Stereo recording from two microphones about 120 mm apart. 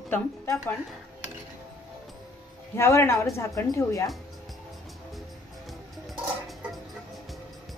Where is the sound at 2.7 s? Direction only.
20° left (ahead or behind).